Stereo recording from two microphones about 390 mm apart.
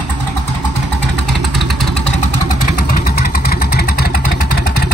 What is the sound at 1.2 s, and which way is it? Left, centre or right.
Vehicle, centre.